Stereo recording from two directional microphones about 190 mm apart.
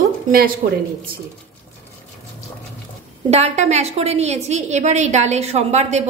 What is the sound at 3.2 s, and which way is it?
A woman's voice, 35° right (ahead or behind).